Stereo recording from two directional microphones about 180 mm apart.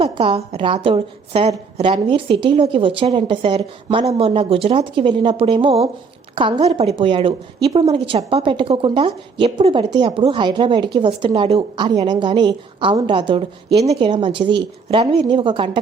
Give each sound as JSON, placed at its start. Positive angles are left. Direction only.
{"t": 0.0, "sound": "a woman's voice", "side_deg": -30}